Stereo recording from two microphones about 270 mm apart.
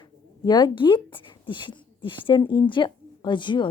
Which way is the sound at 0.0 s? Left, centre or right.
Centre.